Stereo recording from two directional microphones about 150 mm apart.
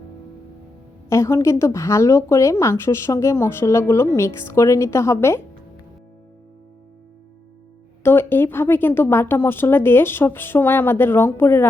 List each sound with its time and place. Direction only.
1.1 s speech: 20° left (ahead or behind)
8.0 s a woman's voice: 15° left (ahead or behind)